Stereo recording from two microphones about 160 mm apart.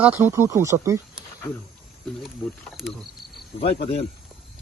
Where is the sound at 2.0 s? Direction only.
Centre (ahead or behind).